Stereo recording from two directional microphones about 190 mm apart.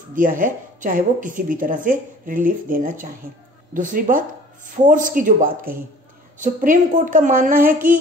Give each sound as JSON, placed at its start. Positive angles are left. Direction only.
{"t": 0.1, "sound": "a woman's voice", "side_deg": -45}